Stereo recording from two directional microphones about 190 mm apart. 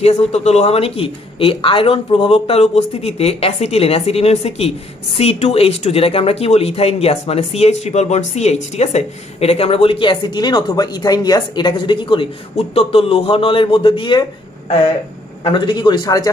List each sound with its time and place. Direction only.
0.0 s speech: 35° left (ahead or behind)
15.4 s a man's voice: 25° left (ahead or behind)